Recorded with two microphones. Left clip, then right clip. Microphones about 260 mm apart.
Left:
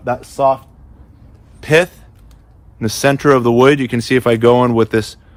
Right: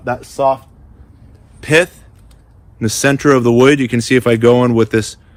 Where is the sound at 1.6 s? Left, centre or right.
Left.